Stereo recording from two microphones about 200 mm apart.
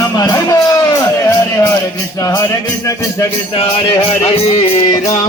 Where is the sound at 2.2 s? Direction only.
15° left (ahead or behind).